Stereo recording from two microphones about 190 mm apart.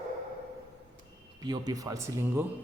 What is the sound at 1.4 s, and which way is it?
Speech, 20° right (ahead or behind).